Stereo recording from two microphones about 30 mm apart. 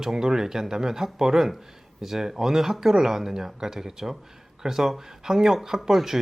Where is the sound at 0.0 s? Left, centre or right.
Centre.